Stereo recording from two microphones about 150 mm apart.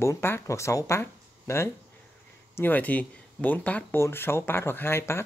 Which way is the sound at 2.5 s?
10° left (ahead or behind).